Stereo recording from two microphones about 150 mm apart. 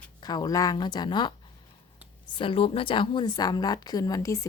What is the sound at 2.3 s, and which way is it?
A woman's voice, 35° left (ahead or behind).